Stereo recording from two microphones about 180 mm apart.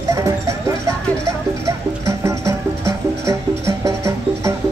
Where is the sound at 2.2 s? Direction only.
15° right (ahead or behind).